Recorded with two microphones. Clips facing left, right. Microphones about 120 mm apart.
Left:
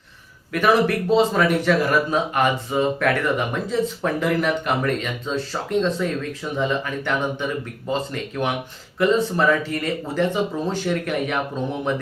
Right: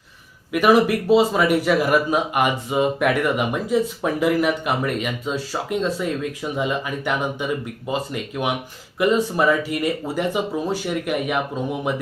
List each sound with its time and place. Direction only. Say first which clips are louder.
0.5 s speech: right 2 dB; 10° right (ahead or behind)